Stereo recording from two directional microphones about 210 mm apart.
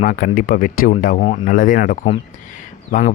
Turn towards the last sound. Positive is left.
turn(degrees=35)  # may be behind; listen again after turning